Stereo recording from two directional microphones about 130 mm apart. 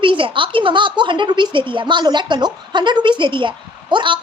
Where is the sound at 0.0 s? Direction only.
40° right (ahead or behind).